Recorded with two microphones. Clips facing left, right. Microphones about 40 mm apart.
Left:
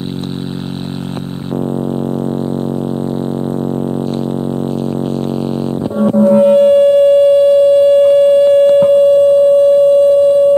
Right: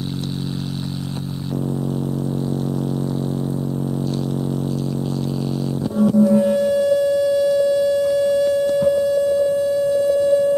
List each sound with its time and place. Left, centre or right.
5.9 s sine wave: left